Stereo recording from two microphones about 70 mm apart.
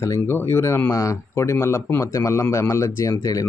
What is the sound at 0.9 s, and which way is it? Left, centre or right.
Speech, left.